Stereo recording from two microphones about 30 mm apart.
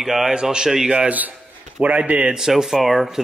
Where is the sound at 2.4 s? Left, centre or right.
Centre.